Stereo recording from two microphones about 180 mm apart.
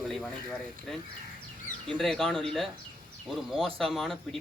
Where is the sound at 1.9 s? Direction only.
5° left (ahead or behind).